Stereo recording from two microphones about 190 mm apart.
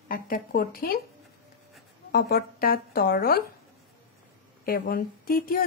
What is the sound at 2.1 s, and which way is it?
Speech, 55° left (ahead or behind).